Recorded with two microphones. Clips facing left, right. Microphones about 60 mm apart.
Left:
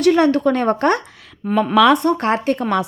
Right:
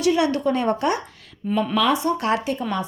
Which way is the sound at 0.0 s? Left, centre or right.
Left.